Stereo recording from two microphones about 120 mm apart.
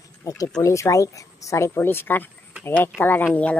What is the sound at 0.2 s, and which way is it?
Speech, 25° left (ahead or behind).